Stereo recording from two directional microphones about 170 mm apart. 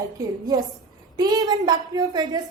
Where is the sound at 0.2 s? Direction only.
25° right (ahead or behind).